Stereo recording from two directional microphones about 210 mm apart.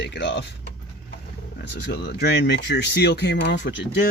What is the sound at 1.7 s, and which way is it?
Speech, 55° left (ahead or behind).